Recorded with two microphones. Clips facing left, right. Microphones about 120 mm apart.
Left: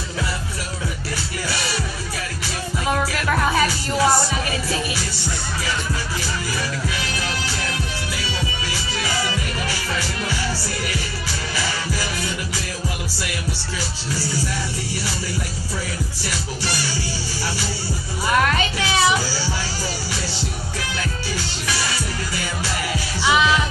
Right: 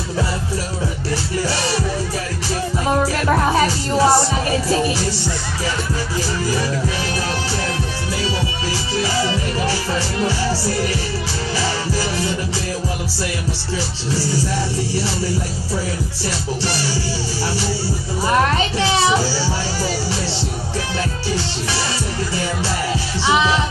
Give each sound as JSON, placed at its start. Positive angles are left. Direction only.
{"t": 1.5, "sound": "music", "side_deg": -35}
{"t": 2.9, "sound": "music", "side_deg": -30}
{"t": 8.9, "sound": "music", "side_deg": -30}
{"t": 18.2, "sound": "music", "side_deg": -30}
{"t": 23.2, "sound": "music", "side_deg": -30}